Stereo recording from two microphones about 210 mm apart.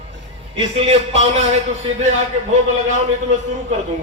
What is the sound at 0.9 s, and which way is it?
Speech, 30° right (ahead or behind).